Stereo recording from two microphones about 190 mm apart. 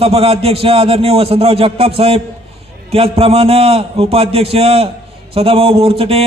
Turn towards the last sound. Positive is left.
turn(degrees=-30)  # may be behind; listen again after turning